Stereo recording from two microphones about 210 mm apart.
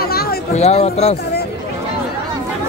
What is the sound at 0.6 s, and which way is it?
Speech, 30° left (ahead or behind).